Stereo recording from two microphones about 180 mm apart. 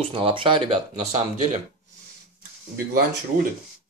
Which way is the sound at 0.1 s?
30° right (ahead or behind).